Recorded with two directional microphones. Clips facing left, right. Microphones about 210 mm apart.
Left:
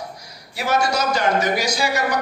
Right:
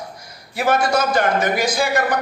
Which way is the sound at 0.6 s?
55° right (ahead or behind).